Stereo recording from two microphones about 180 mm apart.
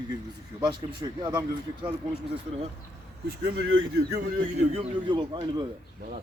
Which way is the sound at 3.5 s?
80° right.